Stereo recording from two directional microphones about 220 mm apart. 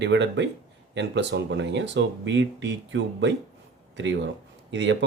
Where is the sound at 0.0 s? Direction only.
55° right (ahead or behind).